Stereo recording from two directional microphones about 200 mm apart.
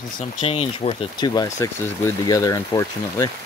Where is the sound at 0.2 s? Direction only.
30° left (ahead or behind).